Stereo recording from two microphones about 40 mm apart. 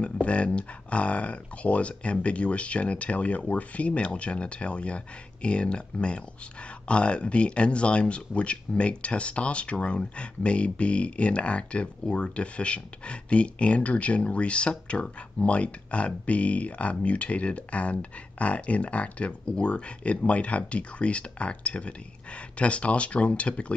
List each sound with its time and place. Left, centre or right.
0.0 s speech: left